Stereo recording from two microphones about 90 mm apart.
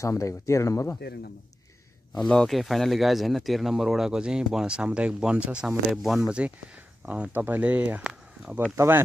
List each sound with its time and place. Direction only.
0.0 s speech: 35° left (ahead or behind)
2.1 s speech: 5° left (ahead or behind)
7.1 s speech: 20° right (ahead or behind)
8.0 s a sound: 10° right (ahead or behind)
8.7 s speech: 25° right (ahead or behind)